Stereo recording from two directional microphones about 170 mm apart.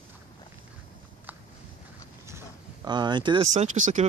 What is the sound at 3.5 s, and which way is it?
Speech, 45° right (ahead or behind).